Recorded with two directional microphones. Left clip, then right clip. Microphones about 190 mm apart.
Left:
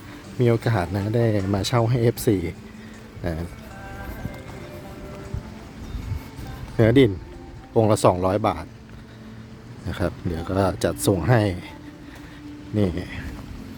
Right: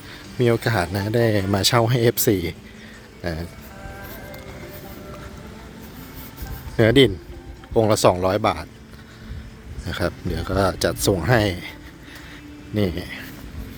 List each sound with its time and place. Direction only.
0.3 s speech: 5° left (ahead or behind)
6.7 s speech: 5° left (ahead or behind)
9.8 s speech: 10° left (ahead or behind)
12.7 s speech: 10° left (ahead or behind)